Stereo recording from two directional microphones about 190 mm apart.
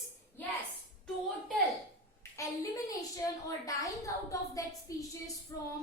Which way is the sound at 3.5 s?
15° left (ahead or behind).